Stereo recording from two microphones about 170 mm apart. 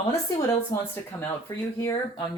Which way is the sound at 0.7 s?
15° left (ahead or behind).